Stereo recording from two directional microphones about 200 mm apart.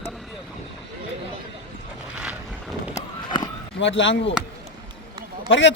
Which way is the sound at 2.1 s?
5° right (ahead or behind).